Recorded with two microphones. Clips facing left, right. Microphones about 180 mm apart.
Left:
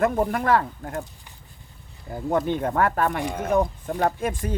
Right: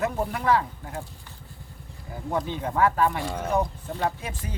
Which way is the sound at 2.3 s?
55° left (ahead or behind).